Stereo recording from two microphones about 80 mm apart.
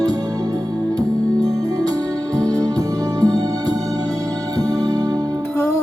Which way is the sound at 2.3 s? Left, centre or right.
Right.